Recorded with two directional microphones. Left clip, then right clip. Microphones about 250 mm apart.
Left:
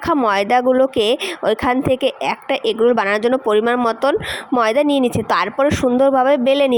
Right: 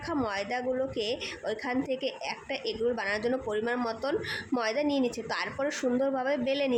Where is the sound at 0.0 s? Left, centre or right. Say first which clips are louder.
Left 16 dB; left.